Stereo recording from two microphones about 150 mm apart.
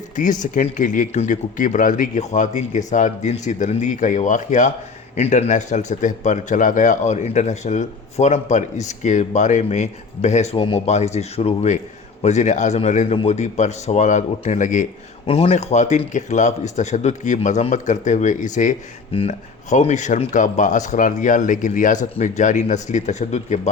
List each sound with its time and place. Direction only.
0.2 s speech: 60° left (ahead or behind)
5.1 s speech: 45° left (ahead or behind)
15.3 s speech: 45° left (ahead or behind)